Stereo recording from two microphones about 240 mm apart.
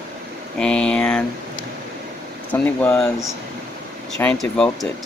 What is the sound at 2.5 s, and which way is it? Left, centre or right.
Speech, centre.